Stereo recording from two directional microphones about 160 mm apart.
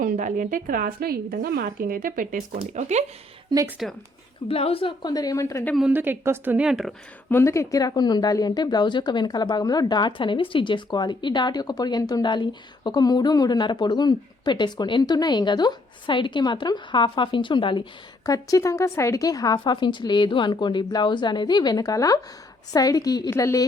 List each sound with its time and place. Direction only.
0.0 s a woman's voice: 55° right (ahead or behind)
3.5 s a woman's voice: 25° right (ahead or behind)
4.4 s speech: 35° left (ahead or behind); by 5.7 s 20° left (ahead or behind)
5.7 s a woman's voice: 10° right (ahead or behind)
7.3 s speech: 15° left (ahead or behind)